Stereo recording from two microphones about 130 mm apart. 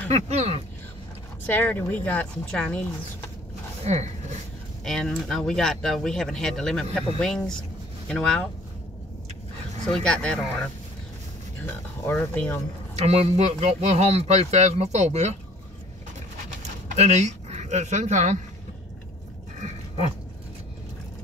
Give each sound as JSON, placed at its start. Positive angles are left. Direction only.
{"t": 0.1, "sound": "a man's voice", "side_deg": -55}
{"t": 1.4, "sound": "a woman's voice", "side_deg": 15}
{"t": 3.8, "sound": "a man's voice", "side_deg": -60}
{"t": 4.8, "sound": "a woman's voice", "side_deg": 5}
{"t": 9.8, "sound": "a woman's voice", "side_deg": 5}
{"t": 11.6, "sound": "a woman's voice", "side_deg": 15}
{"t": 12.9, "sound": "a man's voice", "side_deg": -55}
{"t": 16.9, "sound": "speech", "side_deg": -60}